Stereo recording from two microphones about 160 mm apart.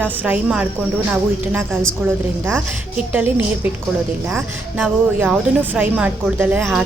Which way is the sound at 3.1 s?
10° right (ahead or behind).